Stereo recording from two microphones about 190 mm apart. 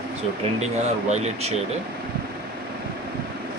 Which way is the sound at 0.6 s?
35° right (ahead or behind).